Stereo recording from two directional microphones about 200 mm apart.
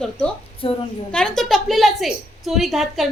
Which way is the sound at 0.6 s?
30° left (ahead or behind).